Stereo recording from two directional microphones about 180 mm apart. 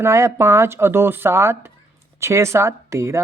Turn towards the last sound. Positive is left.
turn(degrees=-15)  # may be behind; listen again after turning